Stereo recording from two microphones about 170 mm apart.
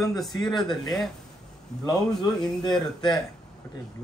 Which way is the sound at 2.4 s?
5° left (ahead or behind).